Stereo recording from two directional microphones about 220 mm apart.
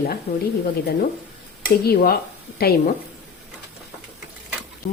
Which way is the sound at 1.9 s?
45° left (ahead or behind).